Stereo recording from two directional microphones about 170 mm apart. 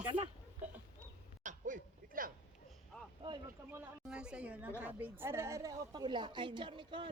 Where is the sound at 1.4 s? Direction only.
50° right (ahead or behind).